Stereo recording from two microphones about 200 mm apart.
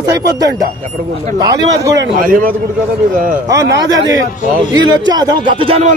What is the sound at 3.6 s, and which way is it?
Speech, 65° right (ahead or behind).